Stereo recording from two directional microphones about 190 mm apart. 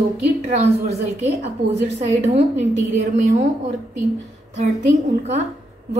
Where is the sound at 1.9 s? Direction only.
35° right (ahead or behind).